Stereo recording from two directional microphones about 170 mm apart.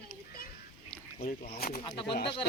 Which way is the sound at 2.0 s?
75° left (ahead or behind).